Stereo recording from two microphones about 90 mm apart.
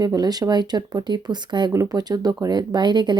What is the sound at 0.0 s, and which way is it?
Speech, 45° right (ahead or behind).